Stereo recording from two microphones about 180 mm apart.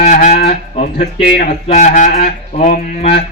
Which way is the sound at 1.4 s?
45° left (ahead or behind).